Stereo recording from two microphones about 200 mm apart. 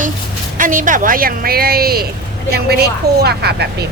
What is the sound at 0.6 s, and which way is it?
Speech, 40° right (ahead or behind).